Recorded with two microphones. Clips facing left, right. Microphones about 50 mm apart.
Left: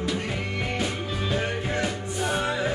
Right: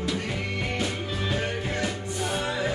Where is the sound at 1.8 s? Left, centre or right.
Centre.